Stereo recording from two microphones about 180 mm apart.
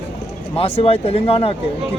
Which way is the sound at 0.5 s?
35° left (ahead or behind).